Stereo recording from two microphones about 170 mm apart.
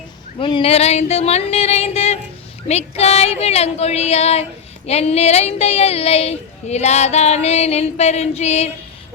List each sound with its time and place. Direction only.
0.3 s speech: 30° left (ahead or behind)